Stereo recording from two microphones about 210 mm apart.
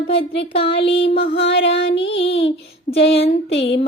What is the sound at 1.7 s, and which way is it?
Child singing, 55° left (ahead or behind).